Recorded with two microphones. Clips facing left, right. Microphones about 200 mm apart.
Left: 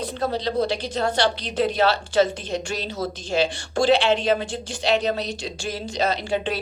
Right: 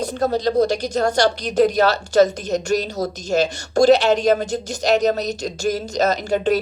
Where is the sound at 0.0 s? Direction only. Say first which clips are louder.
Right 5 dB; 45° right (ahead or behind).